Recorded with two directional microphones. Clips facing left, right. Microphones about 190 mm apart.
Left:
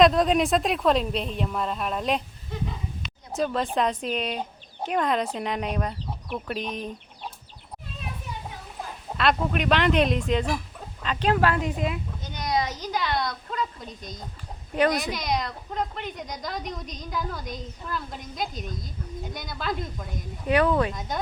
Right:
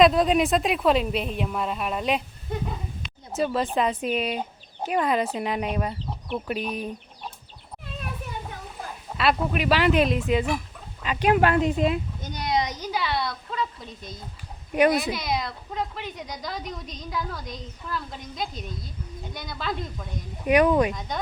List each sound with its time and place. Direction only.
0.0 s a woman's voice: centre (ahead or behind)
3.3 s a woman's voice: 5° right (ahead or behind)
9.1 s a woman's voice: 5° right (ahead or behind); by 11.9 s 25° right (ahead or behind)
12.2 s a sound: 35° right (ahead or behind)
12.5 s a woman's voice: 20° right (ahead or behind); by 20.1 s centre (ahead or behind)
20.5 s speech: 15° right (ahead or behind)
20.9 s a woman's voice: centre (ahead or behind)